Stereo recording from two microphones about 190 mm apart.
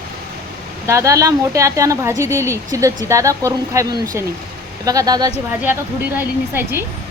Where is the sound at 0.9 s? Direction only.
15° right (ahead or behind).